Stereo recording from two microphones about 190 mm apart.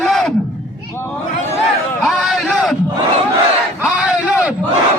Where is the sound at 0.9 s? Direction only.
15° left (ahead or behind).